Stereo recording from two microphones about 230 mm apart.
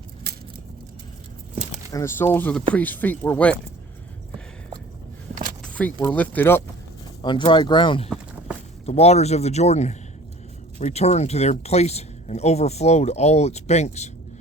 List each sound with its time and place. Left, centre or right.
0.3 s a sound: right
1.9 s speech: centre
5.6 s speech: centre
7.2 s speech: centre